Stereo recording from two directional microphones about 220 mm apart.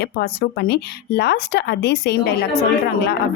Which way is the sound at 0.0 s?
50° left (ahead or behind).